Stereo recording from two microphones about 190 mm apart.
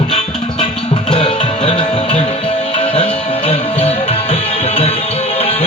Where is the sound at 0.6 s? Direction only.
35° left (ahead or behind).